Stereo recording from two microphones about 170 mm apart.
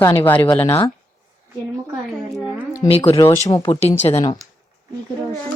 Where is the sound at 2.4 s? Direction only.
5° right (ahead or behind).